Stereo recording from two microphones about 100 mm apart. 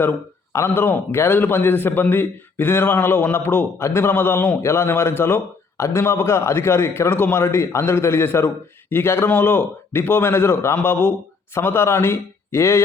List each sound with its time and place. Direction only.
0.5 s a man's voice: 25° left (ahead or behind)